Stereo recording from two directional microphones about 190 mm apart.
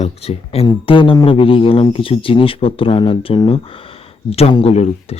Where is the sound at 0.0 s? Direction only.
30° left (ahead or behind).